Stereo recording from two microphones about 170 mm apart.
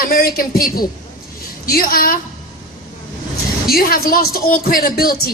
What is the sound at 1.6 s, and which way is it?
Speech, 60° left (ahead or behind).